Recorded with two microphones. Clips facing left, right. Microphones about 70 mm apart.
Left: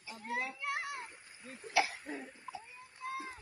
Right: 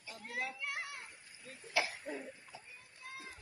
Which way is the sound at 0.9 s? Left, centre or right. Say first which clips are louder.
Left 5 dB; left.